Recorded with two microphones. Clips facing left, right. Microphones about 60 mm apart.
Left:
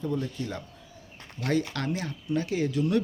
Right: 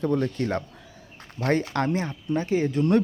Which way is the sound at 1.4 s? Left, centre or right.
Right.